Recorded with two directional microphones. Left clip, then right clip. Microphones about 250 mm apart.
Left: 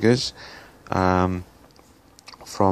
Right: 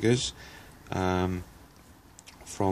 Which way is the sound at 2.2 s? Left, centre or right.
Centre.